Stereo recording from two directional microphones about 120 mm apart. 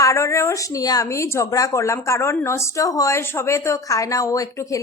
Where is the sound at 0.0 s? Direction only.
25° left (ahead or behind).